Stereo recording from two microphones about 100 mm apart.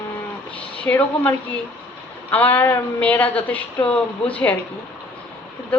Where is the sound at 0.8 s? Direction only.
20° left (ahead or behind).